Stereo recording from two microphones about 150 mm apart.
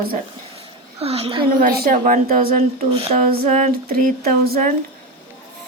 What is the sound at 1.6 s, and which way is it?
A woman's voice, 80° right.